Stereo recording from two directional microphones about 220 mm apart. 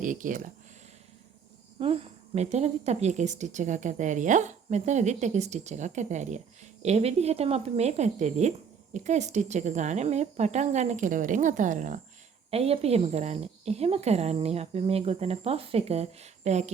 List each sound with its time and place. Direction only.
0.0 s a woman's voice: 35° right (ahead or behind)
1.8 s a woman's voice: 25° right (ahead or behind)